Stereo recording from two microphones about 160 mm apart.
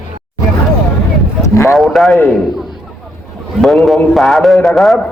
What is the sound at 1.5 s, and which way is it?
Speech, 20° left (ahead or behind).